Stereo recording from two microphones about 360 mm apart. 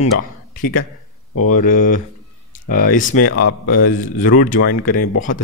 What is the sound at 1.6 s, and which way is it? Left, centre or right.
A man's voice, left.